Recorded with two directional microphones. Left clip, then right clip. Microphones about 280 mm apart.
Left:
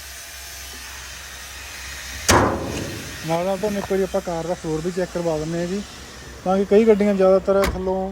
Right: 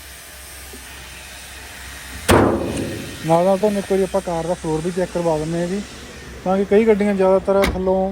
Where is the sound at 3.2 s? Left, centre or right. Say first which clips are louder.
Right 7 dB; right.